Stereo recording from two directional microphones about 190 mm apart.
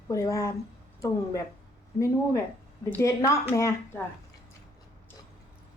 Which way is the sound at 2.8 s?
15° left (ahead or behind).